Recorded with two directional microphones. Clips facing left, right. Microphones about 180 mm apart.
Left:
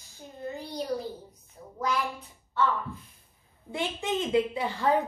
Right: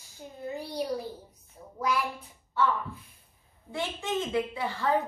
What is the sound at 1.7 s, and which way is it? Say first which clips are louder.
Speech: even; 10° right (ahead or behind).